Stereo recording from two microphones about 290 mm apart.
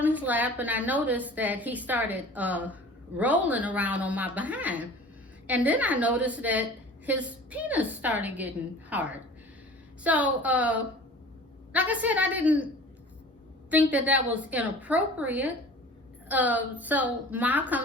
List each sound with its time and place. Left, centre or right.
0.0 s a woman's voice: centre
13.7 s a woman's voice: centre